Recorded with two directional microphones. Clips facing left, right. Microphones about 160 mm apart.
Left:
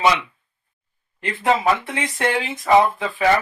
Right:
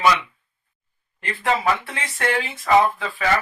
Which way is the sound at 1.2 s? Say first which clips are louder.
Left 3 dB; 20° left (ahead or behind).